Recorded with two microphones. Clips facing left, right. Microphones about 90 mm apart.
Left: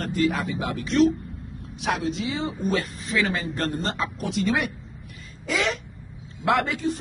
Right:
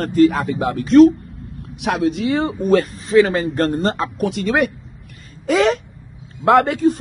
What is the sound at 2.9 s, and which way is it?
Speech, 35° right (ahead or behind).